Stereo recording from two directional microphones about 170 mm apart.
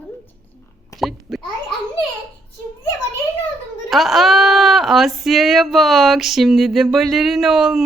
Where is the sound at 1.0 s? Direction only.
Centre (ahead or behind).